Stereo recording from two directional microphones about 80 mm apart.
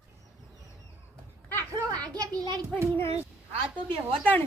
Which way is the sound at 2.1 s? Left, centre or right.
Right.